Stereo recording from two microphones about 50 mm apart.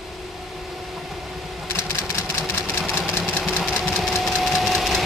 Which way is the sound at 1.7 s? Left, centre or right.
Left.